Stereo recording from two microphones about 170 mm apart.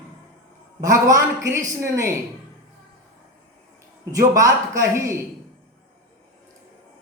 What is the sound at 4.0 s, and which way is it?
A woman's voice, 20° right (ahead or behind).